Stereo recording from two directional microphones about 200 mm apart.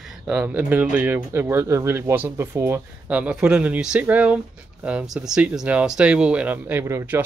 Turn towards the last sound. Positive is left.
turn(degrees=-10)  # may be behind; listen again after turning